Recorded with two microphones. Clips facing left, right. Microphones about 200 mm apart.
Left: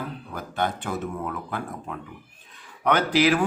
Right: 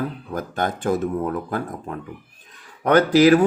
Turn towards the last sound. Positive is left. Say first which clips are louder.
# right 7 dB
turn(degrees=-45)  # may be behind; listen again after turning